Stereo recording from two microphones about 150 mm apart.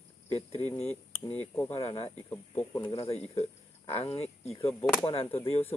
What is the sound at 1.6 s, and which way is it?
Speech, 15° left (ahead or behind).